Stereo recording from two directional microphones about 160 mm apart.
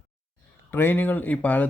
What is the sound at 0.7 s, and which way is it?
Speech, 10° left (ahead or behind).